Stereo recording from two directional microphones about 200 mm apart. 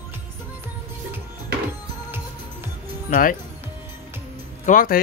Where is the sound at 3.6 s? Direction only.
10° right (ahead or behind).